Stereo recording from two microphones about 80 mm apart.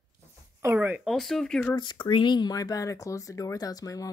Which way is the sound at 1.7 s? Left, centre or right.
Left.